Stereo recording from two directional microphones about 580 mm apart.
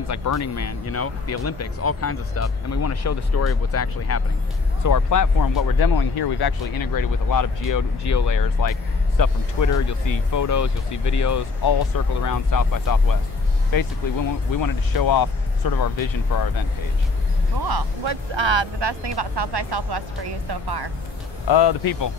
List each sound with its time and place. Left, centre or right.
0.1 s speech: left
17.6 s speech: right
21.5 s speech: left